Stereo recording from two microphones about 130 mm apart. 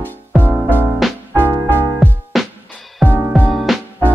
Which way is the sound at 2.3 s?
Centre (ahead or behind).